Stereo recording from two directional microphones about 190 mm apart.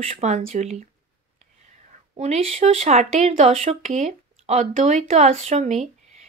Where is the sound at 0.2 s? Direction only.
35° right (ahead or behind).